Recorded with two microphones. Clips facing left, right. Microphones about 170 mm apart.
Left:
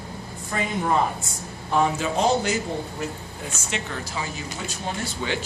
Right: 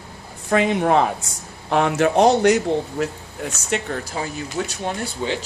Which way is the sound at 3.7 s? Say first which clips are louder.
Right 7 dB; 45° right (ahead or behind).